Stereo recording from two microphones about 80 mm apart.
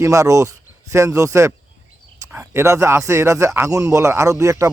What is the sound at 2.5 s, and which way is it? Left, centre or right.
Speech, right.